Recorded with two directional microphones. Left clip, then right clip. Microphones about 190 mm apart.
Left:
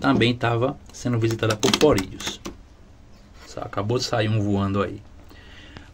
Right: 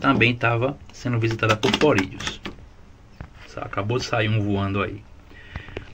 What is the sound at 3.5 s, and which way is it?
Speech, 15° left (ahead or behind).